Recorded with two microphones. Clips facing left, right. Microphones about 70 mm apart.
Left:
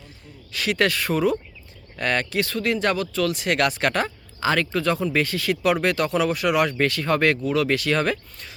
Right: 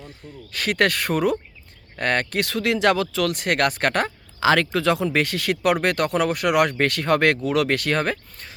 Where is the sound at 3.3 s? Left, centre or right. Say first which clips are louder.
Right 1 dB; right.